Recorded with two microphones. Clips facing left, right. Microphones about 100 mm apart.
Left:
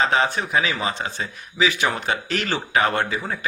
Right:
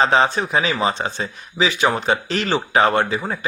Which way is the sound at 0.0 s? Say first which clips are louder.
Right 4 dB; 30° right (ahead or behind).